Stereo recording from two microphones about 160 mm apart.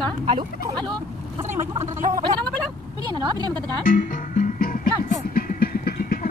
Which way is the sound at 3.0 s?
25° right (ahead or behind).